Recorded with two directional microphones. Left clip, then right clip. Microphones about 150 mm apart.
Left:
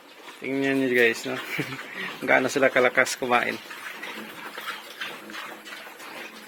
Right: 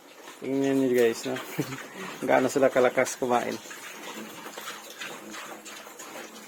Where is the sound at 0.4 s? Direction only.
20° right (ahead or behind).